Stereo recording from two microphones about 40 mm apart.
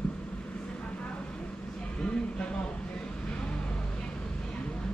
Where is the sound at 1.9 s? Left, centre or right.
Left.